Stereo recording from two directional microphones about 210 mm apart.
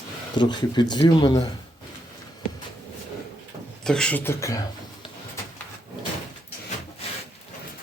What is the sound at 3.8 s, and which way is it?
Speech, 5° left (ahead or behind).